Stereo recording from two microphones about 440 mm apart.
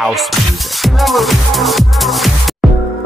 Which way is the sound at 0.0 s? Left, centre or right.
Centre.